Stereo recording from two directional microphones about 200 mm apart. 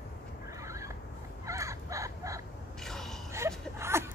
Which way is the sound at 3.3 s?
15° right (ahead or behind).